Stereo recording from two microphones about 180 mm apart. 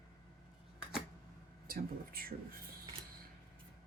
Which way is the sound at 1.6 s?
55° right (ahead or behind).